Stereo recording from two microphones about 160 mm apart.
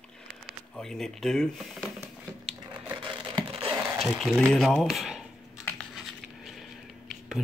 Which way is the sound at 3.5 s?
35° right (ahead or behind).